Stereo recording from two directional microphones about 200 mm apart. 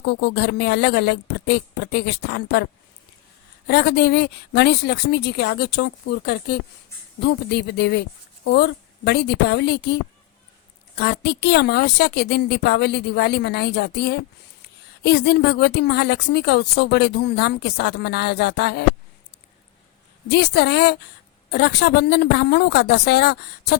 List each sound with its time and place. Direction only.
0.0 s speech: 60° left (ahead or behind)
3.7 s speech: 55° left (ahead or behind)
20.3 s speech: 55° left (ahead or behind)